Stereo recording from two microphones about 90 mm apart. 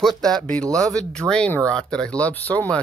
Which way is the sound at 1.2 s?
25° right (ahead or behind).